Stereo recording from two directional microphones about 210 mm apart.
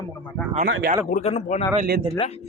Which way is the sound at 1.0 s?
35° left (ahead or behind).